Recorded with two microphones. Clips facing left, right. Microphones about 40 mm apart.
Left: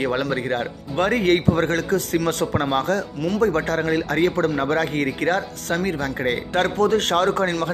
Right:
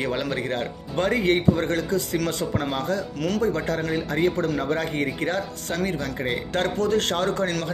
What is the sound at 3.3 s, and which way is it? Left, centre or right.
A man's voice, left.